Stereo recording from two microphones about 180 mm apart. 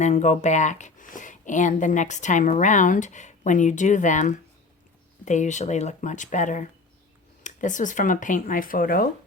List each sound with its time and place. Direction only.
0.0 s speech: 40° left (ahead or behind)